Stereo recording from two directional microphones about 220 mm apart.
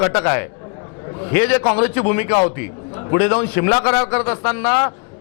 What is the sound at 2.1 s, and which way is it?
A man's voice, 15° left (ahead or behind).